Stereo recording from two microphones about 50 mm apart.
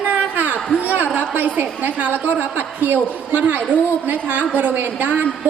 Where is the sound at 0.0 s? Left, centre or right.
Right.